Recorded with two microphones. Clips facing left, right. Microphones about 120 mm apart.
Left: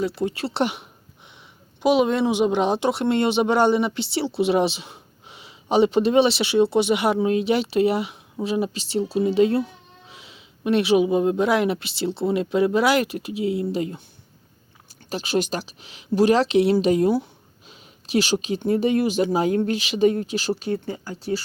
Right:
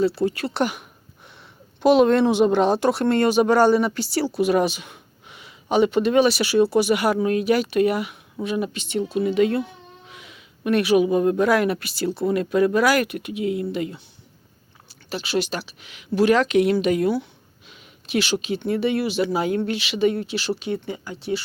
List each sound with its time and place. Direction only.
0.0 s speech: 20° left (ahead or behind)
1.8 s speech: 10° left (ahead or behind); by 13.9 s 30° left (ahead or behind)
15.1 s a woman's voice: 40° left (ahead or behind)
17.7 s a sound: 35° left (ahead or behind)
18.4 s a woman's voice: 40° left (ahead or behind)